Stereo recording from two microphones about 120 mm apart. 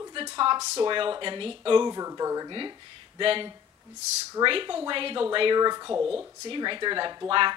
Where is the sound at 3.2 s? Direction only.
45° right (ahead or behind).